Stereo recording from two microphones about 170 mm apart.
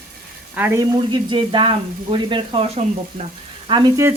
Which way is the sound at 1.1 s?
30° right (ahead or behind).